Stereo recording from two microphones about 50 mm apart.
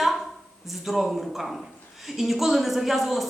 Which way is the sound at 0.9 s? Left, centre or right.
Centre.